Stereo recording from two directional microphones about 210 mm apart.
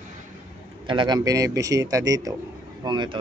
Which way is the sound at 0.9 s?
20° right (ahead or behind).